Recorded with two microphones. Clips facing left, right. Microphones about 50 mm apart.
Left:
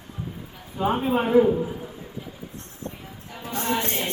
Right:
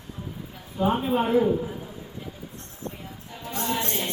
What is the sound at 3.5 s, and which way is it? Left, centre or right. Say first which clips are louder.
Music: left 2 dB; left.